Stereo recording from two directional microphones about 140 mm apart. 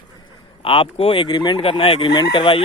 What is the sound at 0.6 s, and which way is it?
Speech, 40° left (ahead or behind).